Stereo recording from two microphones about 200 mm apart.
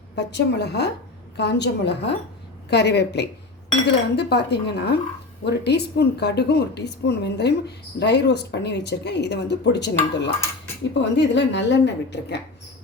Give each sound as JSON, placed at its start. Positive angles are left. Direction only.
{"t": 0.2, "sound": "speech", "side_deg": 60}